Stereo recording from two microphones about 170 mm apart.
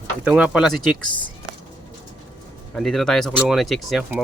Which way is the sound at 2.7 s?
5° left (ahead or behind).